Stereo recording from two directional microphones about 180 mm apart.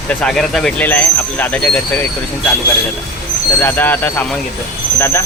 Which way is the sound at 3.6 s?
10° left (ahead or behind).